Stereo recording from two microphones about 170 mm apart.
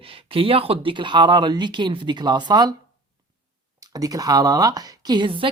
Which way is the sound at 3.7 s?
20° right (ahead or behind).